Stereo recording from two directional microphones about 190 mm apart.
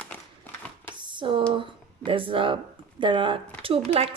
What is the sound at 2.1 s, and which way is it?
A woman's voice, 30° right (ahead or behind).